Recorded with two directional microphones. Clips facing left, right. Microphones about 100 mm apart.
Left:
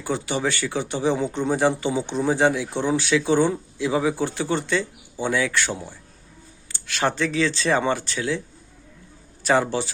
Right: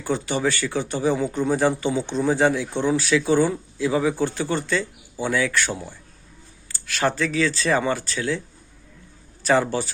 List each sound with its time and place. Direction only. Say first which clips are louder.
0.0 s speech: right 1 dB; 15° left (ahead or behind)
9.4 s speech: even; 15° left (ahead or behind)